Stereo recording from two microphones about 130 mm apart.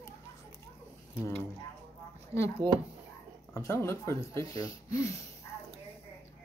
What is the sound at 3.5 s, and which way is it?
Speech, 25° left (ahead or behind).